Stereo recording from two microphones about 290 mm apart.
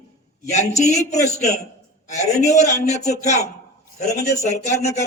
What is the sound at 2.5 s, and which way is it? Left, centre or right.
Speech, left.